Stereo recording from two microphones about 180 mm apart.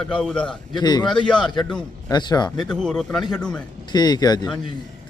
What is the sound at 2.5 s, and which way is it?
A man's voice, 5° left (ahead or behind).